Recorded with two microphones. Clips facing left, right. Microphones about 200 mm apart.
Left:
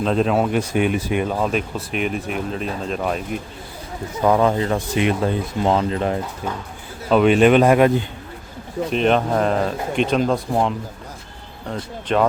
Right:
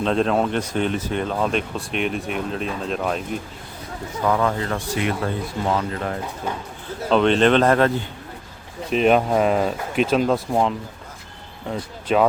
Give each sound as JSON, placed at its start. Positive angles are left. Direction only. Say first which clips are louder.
{"t": 0.0, "sound": "speech", "louder": "left 1 dB", "side_deg": 5}
{"t": 4.2, "sound": "speech", "louder": "left 4 dB", "side_deg": 20}
{"t": 7.1, "sound": "speech", "louder": "left 3 dB", "side_deg": 10}
{"t": 8.9, "sound": "speech", "louder": "right 1 dB", "side_deg": -5}